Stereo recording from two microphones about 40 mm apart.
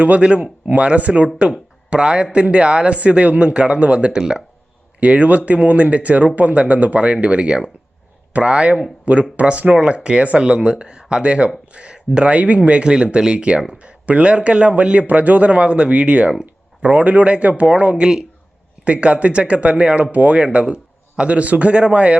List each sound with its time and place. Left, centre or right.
0.0 s speech: right
1.9 s speech: right
4.9 s speech: right
9.7 s speech: right
18.0 s speech: centre
18.9 s speech: right